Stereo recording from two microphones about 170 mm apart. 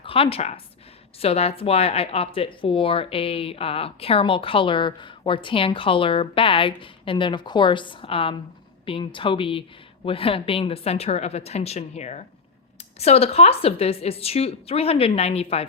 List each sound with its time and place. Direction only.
0.0 s a woman's voice: 35° left (ahead or behind)